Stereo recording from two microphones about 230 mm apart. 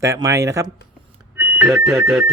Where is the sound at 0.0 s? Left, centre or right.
Centre.